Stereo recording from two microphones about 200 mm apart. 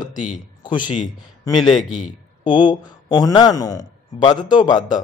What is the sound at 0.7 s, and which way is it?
Speech, 25° left (ahead or behind).